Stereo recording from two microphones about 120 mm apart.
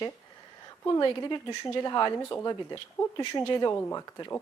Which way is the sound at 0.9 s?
35° left (ahead or behind).